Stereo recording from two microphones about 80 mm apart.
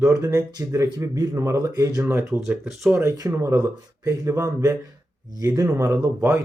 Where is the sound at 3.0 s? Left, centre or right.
Right.